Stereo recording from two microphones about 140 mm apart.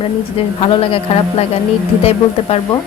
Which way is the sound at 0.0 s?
40° left (ahead or behind).